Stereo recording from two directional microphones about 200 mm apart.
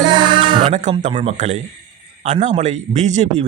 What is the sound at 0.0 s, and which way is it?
Music, 20° right (ahead or behind).